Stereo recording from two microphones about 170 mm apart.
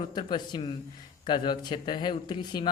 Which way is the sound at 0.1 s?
25° left (ahead or behind).